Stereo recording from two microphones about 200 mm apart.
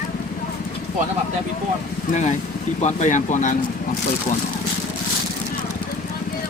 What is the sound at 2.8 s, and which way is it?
Speech, 35° left (ahead or behind).